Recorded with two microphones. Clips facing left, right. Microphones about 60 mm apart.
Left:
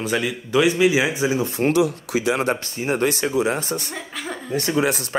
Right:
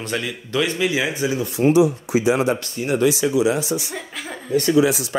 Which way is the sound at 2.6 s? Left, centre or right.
Left.